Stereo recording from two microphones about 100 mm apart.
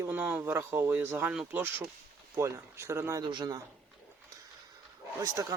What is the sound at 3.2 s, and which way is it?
Speech, 45° right (ahead or behind).